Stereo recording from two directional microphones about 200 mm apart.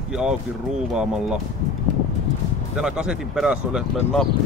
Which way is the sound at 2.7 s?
5° right (ahead or behind).